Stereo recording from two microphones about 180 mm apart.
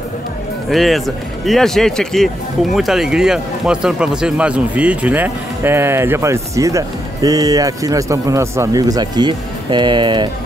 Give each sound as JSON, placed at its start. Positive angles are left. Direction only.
{"t": 0.7, "sound": "speech", "side_deg": 0}